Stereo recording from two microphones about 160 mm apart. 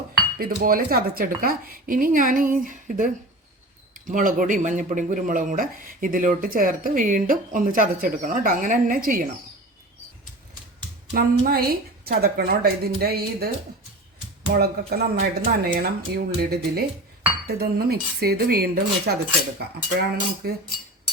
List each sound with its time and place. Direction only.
0.3 s speech: 65° right (ahead or behind)
11.1 s a woman's voice: 70° right (ahead or behind)
14.5 s a woman's voice: 65° right (ahead or behind)
19.5 s cutlery: 90° right